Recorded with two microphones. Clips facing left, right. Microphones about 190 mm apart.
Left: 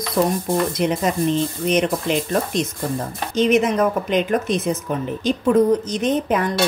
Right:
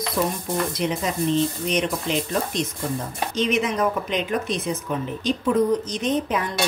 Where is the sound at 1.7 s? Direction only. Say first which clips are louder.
Left 5 dB; 50° left (ahead or behind).